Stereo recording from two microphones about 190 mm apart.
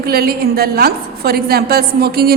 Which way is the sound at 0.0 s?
55° right (ahead or behind).